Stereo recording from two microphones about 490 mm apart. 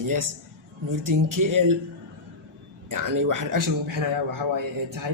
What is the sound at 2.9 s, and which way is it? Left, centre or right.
Speech, right.